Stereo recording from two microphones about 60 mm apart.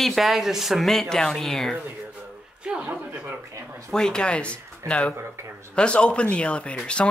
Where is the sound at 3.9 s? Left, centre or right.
Centre.